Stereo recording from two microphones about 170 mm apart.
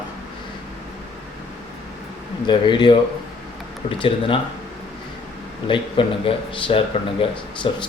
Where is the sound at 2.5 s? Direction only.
30° left (ahead or behind).